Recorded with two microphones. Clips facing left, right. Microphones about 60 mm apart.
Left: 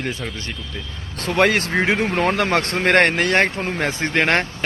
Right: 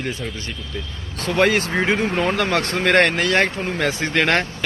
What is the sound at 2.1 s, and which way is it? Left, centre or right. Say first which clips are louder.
A man's voice: left 1 dB; left.